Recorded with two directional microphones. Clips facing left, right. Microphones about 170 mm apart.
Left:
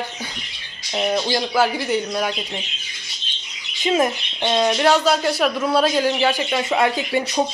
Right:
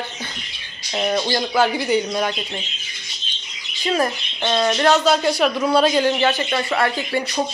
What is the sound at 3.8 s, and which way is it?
Speech, 20° left (ahead or behind).